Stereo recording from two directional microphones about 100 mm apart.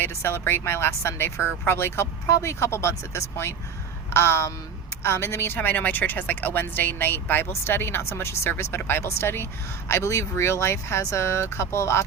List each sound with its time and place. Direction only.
0.0 s a woman's voice: 25° left (ahead or behind)